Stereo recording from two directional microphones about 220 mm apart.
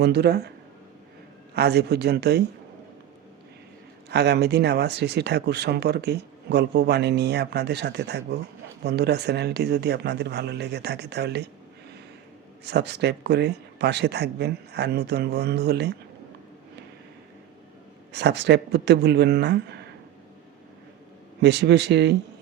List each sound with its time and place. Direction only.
0.0 s speech: 50° right (ahead or behind)
1.5 s speech: 50° right (ahead or behind)
4.1 s speech: 50° right (ahead or behind)
12.6 s speech: 50° right (ahead or behind)
18.1 s speech: 50° right (ahead or behind)
21.4 s speech: 50° right (ahead or behind)